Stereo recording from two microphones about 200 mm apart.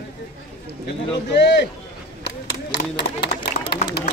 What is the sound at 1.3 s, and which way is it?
Speech, 55° left (ahead or behind).